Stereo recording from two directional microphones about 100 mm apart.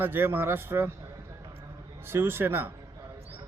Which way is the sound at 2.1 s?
25° right (ahead or behind).